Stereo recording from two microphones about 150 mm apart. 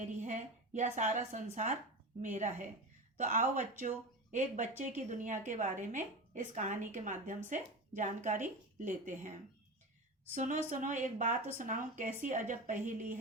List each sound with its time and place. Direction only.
0.0 s a sound: 55° right (ahead or behind)
0.9 s a woman's voice: 55° right (ahead or behind)
10.3 s a woman's voice: 60° right (ahead or behind)